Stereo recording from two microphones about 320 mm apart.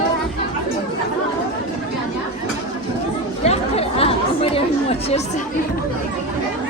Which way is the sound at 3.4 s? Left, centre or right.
Centre.